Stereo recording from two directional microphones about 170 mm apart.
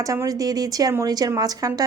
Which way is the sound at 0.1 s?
20° right (ahead or behind).